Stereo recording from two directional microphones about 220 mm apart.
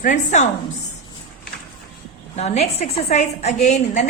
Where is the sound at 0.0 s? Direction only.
35° left (ahead or behind).